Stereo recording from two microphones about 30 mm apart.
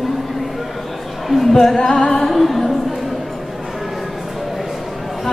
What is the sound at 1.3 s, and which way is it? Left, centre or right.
Speech, centre.